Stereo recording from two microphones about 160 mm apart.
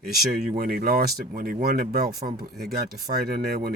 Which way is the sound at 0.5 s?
65° right (ahead or behind).